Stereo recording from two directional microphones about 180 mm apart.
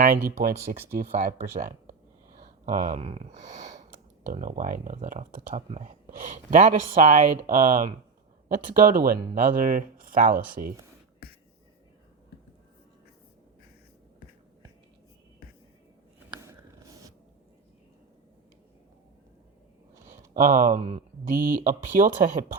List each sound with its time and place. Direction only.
0.0 s speech: 50° right (ahead or behind)
16.3 s a sound: 15° right (ahead or behind)
20.3 s speech: 50° right (ahead or behind)